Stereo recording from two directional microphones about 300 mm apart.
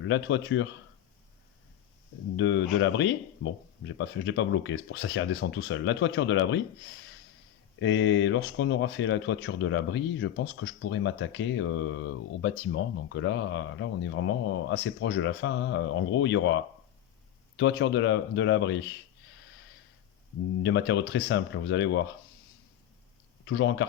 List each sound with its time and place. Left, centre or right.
0.0 s speech: left
2.3 s speech: left
7.8 s speech: left
17.6 s speech: left
20.6 s speech: left
23.5 s speech: left